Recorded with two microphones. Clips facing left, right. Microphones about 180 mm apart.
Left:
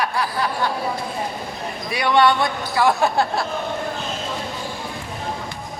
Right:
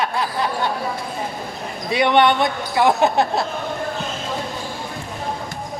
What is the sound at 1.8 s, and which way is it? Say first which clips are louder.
Speech: right 2 dB; 25° right (ahead or behind).